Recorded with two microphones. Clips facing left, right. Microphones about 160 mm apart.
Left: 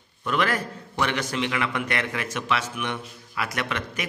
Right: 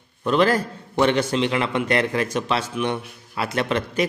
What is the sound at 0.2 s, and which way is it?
A man's voice, 30° right (ahead or behind).